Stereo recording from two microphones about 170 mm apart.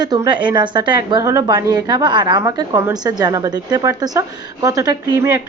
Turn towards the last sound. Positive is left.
turn(degrees=-15)  # may be behind; listen again after turning